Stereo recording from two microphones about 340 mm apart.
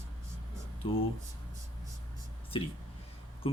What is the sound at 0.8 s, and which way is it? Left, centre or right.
Speech, centre.